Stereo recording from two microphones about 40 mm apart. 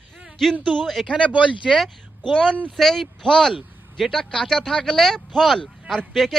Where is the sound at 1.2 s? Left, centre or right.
Right.